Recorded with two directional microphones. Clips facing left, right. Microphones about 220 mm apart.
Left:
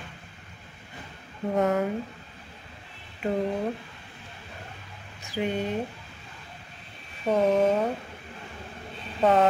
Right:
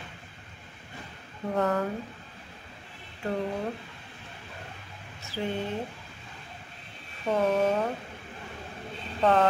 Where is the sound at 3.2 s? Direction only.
20° left (ahead or behind).